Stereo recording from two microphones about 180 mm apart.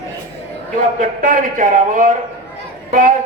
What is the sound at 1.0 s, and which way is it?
A man's voice, 45° right (ahead or behind).